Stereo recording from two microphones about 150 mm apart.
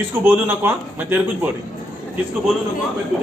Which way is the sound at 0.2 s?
15° right (ahead or behind).